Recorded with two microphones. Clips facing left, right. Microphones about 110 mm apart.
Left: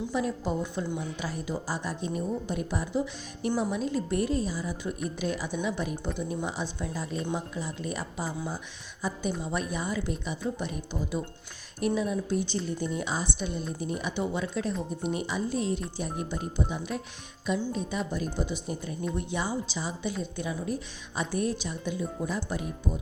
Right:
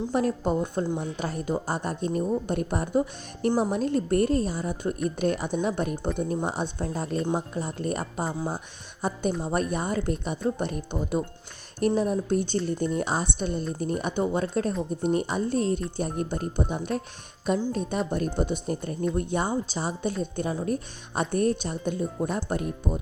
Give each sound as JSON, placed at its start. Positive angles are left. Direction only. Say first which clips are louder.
{"t": 0.1, "sound": "a woman's voice", "louder": "right 6 dB", "side_deg": -50}